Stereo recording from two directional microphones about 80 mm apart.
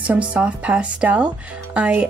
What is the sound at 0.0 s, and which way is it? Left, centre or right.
Speech, centre.